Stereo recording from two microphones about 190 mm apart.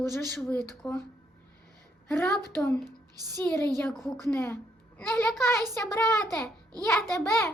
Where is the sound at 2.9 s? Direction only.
20° right (ahead or behind).